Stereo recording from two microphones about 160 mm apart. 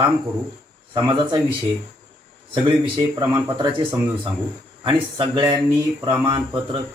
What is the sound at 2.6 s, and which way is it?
Speech, 30° right (ahead or behind).